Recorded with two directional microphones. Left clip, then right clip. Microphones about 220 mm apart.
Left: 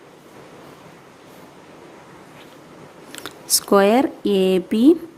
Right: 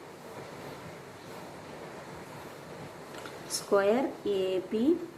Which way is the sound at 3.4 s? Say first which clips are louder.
Left 11 dB; 55° left (ahead or behind).